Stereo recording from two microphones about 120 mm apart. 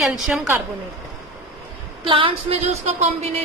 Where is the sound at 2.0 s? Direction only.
50° right (ahead or behind).